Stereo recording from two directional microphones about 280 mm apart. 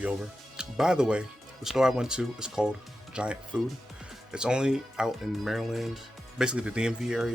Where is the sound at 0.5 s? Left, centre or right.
Centre.